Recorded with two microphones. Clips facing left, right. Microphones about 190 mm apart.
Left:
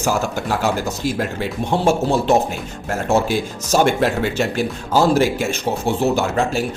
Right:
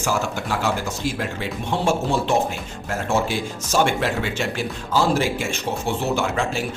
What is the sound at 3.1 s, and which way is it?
Speech, 40° left (ahead or behind).